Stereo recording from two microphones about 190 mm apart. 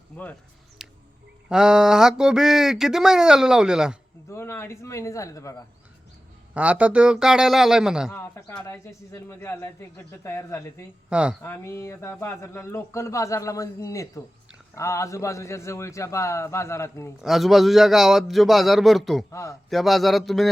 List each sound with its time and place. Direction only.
0.8 s music: centre (ahead or behind)
1.5 s speech: 5° right (ahead or behind)
4.3 s speech: 15° left (ahead or behind)
6.5 s speech: 5° right (ahead or behind)
8.1 s speech: 10° left (ahead or behind)
11.1 s speech: 5° right (ahead or behind)
11.4 s speech: 15° left (ahead or behind)
17.2 s speech: centre (ahead or behind)
19.3 s speech: 15° left (ahead or behind)
19.7 s speech: centre (ahead or behind)